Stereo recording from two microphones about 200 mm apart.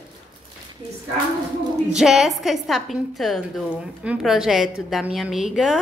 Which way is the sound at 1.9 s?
Centre (ahead or behind).